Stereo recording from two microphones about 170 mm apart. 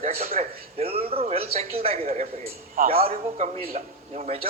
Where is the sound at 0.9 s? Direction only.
35° right (ahead or behind).